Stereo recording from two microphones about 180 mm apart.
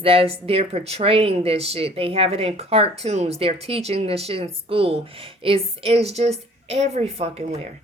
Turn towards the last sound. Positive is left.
turn(degrees=-35)  # may be behind; listen again after turning